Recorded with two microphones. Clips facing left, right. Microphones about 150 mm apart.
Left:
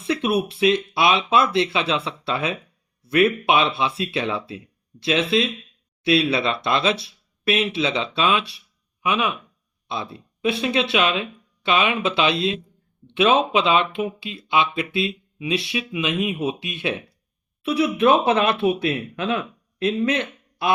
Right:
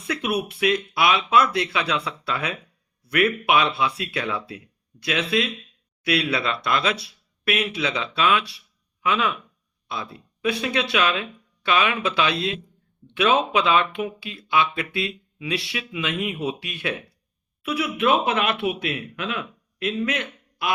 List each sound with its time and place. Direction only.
0.1 s speech: 30° left (ahead or behind)